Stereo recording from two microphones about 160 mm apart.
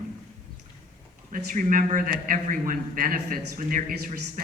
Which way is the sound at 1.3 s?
55° right (ahead or behind).